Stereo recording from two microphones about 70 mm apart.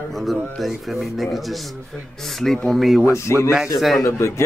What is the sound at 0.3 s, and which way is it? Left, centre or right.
Speech, centre.